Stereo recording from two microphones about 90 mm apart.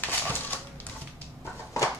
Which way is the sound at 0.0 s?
20° left (ahead or behind).